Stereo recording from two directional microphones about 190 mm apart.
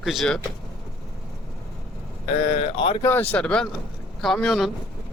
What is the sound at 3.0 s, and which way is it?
Speech, 10° left (ahead or behind).